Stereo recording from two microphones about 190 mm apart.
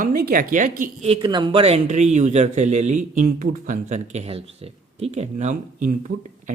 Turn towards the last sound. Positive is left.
turn(degrees=-40)  # may be behind; listen again after turning